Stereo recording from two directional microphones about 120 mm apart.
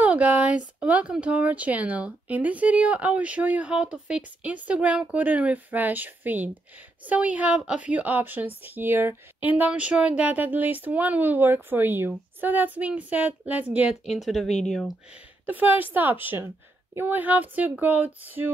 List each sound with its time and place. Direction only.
0.0 s a sound: 10° right (ahead or behind)
0.7 s speech: 10° right (ahead or behind)
14.1 s speech: centre (ahead or behind)
15.4 s speech: 15° right (ahead or behind)